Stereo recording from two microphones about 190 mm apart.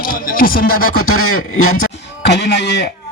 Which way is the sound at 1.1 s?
90° left.